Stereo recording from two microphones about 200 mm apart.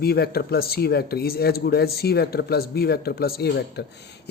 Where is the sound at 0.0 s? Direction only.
50° left (ahead or behind).